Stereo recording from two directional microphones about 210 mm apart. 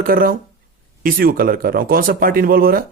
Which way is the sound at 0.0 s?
45° right (ahead or behind).